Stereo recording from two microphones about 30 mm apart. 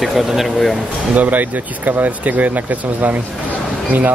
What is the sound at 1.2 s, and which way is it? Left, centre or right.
Speech, right.